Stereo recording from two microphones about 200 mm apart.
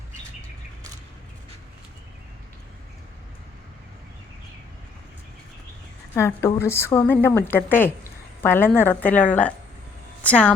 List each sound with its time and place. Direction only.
6.1 s a woman's voice: 15° left (ahead or behind)
10.2 s a woman's voice: 5° left (ahead or behind)